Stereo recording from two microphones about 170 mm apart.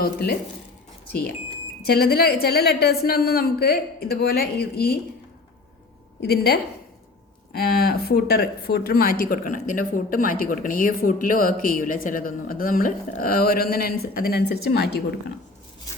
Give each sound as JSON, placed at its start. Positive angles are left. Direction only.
{"t": 0.0, "sound": "a woman's voice", "side_deg": 65}
{"t": 1.8, "sound": "a woman's voice", "side_deg": 65}
{"t": 6.1, "sound": "a woman's voice", "side_deg": 70}